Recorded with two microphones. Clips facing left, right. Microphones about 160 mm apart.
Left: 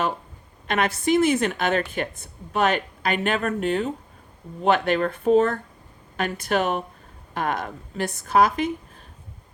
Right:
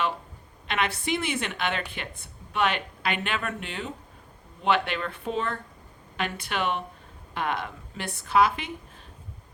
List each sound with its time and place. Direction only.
0.7 s speech: 45° left (ahead or behind)